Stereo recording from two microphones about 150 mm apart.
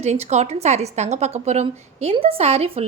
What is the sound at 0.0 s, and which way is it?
A woman's voice, 50° right (ahead or behind).